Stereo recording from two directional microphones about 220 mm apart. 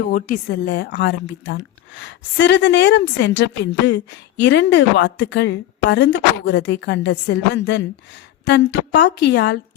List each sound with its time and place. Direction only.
0.1 s speech: 40° left (ahead or behind)